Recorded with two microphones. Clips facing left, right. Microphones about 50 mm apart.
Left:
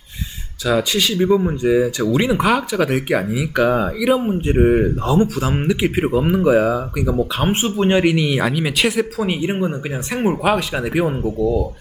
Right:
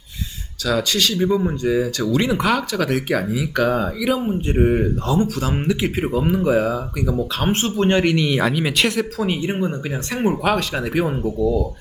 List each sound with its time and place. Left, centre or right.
0.6 s speech: centre
7.3 s speech: centre